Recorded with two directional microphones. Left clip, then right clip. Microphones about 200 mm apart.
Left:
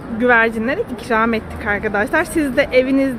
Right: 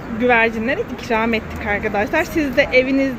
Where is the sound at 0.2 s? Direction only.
10° left (ahead or behind).